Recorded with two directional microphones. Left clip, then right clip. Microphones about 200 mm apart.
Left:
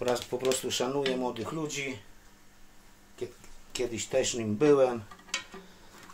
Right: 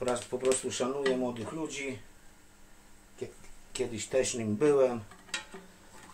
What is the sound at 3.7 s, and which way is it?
Speech, 20° left (ahead or behind).